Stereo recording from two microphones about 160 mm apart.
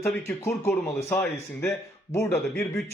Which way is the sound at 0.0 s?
15° left (ahead or behind).